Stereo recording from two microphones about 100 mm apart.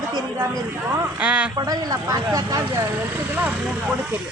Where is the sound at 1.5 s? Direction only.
40° right (ahead or behind).